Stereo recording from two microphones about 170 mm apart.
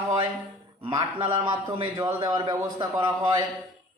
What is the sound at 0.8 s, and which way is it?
A man's voice, 25° right (ahead or behind).